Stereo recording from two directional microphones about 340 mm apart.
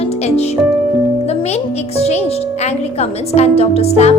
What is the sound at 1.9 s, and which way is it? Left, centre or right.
Speech, centre.